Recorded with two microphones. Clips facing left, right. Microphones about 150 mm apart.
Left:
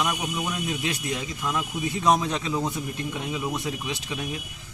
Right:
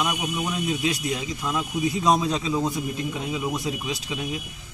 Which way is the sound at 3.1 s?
15° right (ahead or behind).